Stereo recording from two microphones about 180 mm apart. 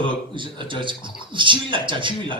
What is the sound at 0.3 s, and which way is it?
Speech, 25° right (ahead or behind).